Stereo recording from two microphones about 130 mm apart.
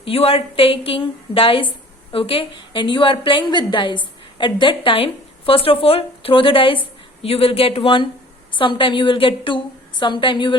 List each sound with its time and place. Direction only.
0.0 s a woman's voice: 45° left (ahead or behind)